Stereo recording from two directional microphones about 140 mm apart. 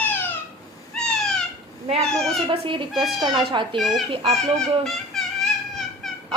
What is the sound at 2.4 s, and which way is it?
Speech, 40° right (ahead or behind).